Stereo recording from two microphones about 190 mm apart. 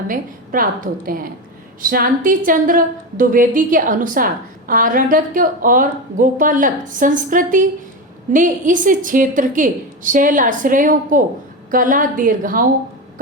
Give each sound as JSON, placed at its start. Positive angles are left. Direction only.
{"t": 0.1, "sound": "a woman's voice", "side_deg": -50}